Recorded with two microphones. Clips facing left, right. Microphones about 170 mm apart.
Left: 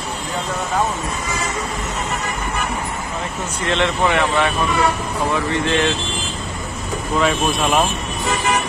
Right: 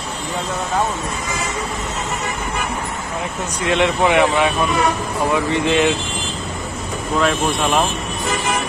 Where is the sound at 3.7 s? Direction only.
15° right (ahead or behind).